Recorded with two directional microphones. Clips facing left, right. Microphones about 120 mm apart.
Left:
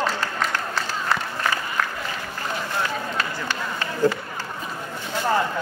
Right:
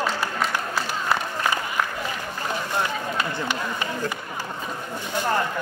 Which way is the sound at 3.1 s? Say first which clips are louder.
Right 1 dB; 15° right (ahead or behind).